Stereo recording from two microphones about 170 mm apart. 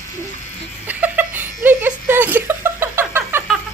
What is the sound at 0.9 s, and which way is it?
Laughter, 10° right (ahead or behind).